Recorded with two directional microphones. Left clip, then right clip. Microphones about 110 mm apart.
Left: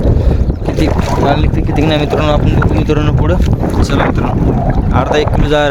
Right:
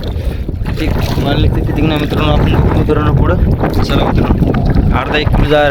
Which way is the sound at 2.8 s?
50° left (ahead or behind).